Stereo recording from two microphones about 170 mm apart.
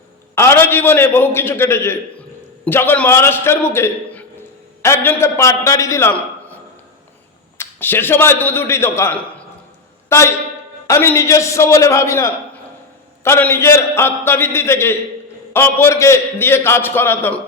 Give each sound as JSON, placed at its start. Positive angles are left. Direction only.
{"t": 0.3, "sound": "a man's voice", "side_deg": 15}
{"t": 7.6, "sound": "a man's voice", "side_deg": 10}